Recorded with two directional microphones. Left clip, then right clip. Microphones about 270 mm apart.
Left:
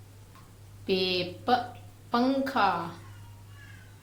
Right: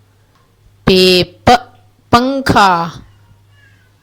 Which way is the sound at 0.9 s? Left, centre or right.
Right.